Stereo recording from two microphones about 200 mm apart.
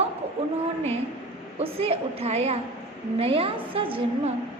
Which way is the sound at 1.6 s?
30° right (ahead or behind).